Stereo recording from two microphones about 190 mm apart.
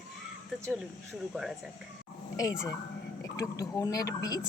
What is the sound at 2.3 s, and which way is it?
Speech, 15° left (ahead or behind).